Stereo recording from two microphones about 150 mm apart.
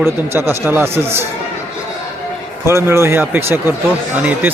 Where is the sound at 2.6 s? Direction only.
20° right (ahead or behind).